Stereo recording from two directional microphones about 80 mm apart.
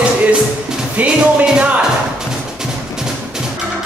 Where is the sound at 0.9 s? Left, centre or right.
Centre.